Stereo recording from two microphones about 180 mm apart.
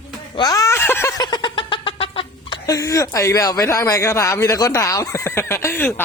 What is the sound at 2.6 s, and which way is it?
Speech, 20° left (ahead or behind).